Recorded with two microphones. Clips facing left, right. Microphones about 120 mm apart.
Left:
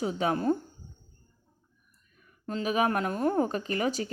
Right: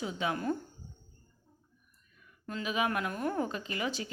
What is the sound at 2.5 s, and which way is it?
A woman's voice, 40° left (ahead or behind).